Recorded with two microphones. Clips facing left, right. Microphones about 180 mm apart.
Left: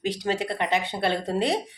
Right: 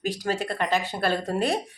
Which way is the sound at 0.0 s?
25° left (ahead or behind).